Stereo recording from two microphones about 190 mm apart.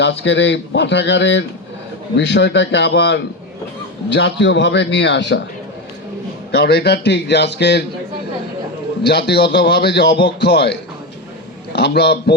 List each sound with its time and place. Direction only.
0.0 s speech: 70° left (ahead or behind)
6.5 s a man's voice: 55° left (ahead or behind)
9.0 s a man's voice: 60° left (ahead or behind)